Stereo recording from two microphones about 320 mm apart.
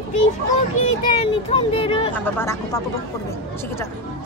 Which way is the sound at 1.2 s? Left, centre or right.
Centre.